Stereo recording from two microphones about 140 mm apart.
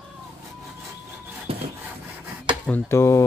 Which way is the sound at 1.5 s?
45° right (ahead or behind).